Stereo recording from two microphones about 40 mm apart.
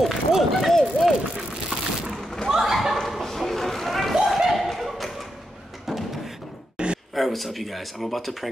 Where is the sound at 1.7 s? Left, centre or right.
Right.